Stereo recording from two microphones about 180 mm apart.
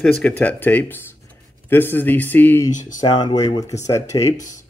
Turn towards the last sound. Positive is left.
turn(degrees=15)  # may be behind; listen again after turning